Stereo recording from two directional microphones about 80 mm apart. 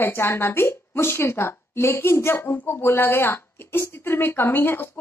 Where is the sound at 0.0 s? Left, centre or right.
Left.